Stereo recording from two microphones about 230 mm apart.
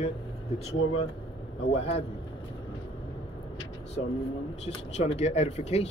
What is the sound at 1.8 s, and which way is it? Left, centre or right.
Speech, left.